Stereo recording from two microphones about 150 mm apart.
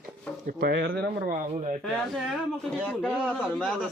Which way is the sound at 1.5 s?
50° right (ahead or behind).